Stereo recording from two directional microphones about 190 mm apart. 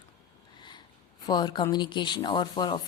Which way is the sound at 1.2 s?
20° left (ahead or behind).